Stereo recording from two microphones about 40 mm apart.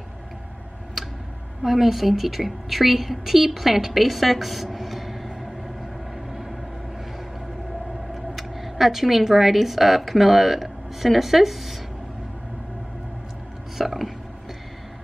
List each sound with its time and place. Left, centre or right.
1.6 s a woman's voice: centre
8.1 s a woman's voice: centre
13.7 s a sound: centre